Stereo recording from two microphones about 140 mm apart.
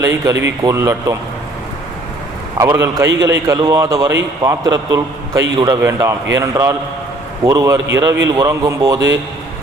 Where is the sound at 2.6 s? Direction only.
25° right (ahead or behind).